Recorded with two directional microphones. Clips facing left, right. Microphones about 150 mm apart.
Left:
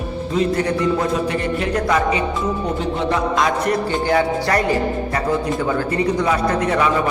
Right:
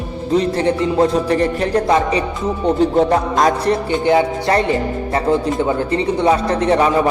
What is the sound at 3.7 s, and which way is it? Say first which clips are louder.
A man's voice: right 3 dB; 20° right (ahead or behind).